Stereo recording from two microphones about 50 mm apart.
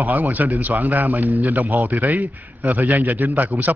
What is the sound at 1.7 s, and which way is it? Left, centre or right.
Speech, right.